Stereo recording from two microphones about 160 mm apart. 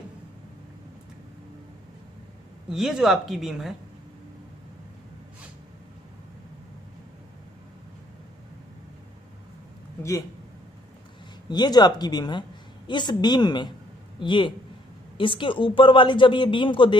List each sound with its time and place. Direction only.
2.7 s speech: centre (ahead or behind)
11.4 s a woman's voice: 25° left (ahead or behind)